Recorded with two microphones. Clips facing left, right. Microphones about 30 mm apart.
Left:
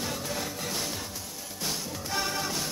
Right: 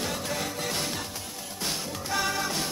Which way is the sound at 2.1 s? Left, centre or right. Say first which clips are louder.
Right 3 dB; centre.